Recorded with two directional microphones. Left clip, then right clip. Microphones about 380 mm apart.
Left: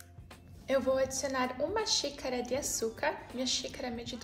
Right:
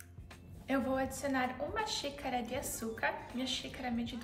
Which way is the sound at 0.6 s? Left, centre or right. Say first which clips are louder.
Left 5 dB; centre.